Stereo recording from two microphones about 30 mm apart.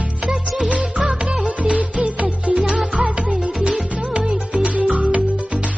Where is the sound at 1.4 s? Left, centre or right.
Right.